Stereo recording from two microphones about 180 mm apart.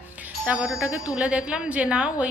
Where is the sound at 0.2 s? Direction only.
5° right (ahead or behind).